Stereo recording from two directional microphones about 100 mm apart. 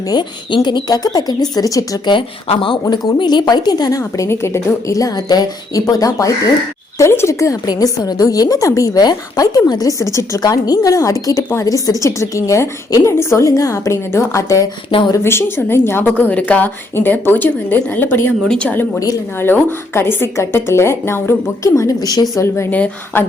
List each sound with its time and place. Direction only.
0.1 s a woman's voice: 50° left (ahead or behind)
2.0 s speech: 60° left (ahead or behind)
2.9 s a woman's voice: 45° left (ahead or behind)
14.8 s speech: 60° left (ahead or behind)
15.1 s a woman's voice: 25° left (ahead or behind)
18.4 s a woman's voice: 10° left (ahead or behind)
18.9 s a woman's voice: 40° left (ahead or behind)
19.4 s a woman's voice: 25° left (ahead or behind); by 22.4 s 40° left (ahead or behind)
22.7 s a woman's voice: 15° left (ahead or behind)